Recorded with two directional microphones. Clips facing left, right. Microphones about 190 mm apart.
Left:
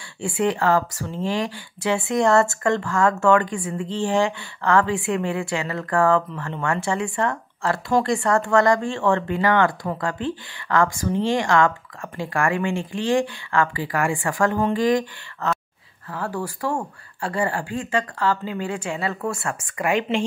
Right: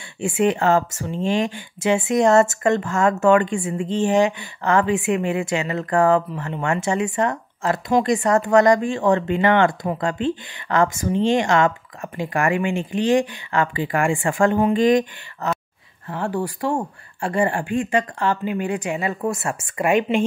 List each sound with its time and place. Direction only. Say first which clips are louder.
0.2 s speech: right 3 dB; 20° right (ahead or behind)